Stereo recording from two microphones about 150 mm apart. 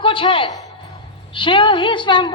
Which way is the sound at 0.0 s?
35° left (ahead or behind).